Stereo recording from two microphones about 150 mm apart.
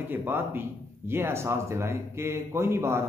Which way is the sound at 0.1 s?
15° right (ahead or behind).